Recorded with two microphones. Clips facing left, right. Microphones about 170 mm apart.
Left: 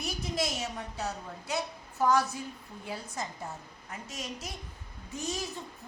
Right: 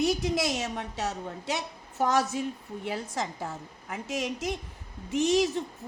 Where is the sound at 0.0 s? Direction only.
90° right.